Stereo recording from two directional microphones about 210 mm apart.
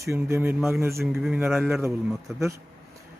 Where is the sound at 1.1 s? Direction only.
Centre (ahead or behind).